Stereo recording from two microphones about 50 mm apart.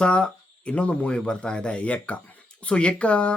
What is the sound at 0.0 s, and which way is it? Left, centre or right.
Speech, left.